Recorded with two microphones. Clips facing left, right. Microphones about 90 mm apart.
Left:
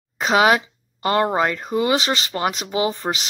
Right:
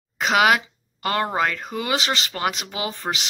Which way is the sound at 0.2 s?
30° left (ahead or behind).